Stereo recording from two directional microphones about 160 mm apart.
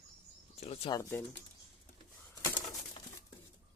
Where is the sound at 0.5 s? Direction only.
40° left (ahead or behind).